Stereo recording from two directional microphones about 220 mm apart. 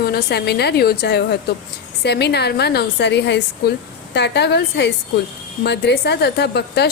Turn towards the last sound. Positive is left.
turn(degrees=50)  # may be behind; listen again after turning